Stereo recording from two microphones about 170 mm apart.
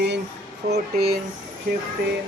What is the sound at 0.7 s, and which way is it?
Speech, 70° right (ahead or behind).